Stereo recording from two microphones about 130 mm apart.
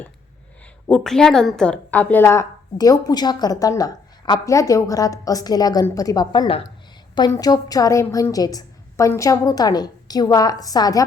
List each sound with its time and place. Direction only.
0.9 s a woman's voice: 5° left (ahead or behind); by 11.0 s 30° left (ahead or behind)